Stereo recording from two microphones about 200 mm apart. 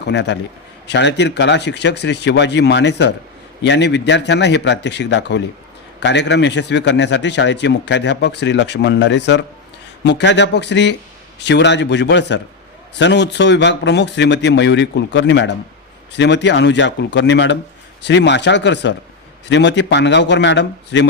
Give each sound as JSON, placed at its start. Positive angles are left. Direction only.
{"t": 0.0, "sound": "a man's voice", "side_deg": 60}